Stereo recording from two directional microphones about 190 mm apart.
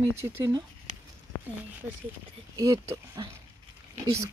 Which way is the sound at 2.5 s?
15° right (ahead or behind).